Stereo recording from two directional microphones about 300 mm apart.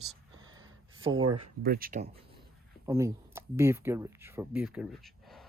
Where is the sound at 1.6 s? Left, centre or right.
Right.